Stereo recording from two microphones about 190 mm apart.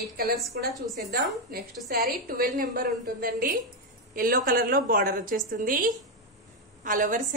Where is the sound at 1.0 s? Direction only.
55° right (ahead or behind).